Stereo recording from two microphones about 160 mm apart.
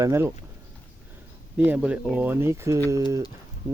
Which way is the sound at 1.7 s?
10° right (ahead or behind).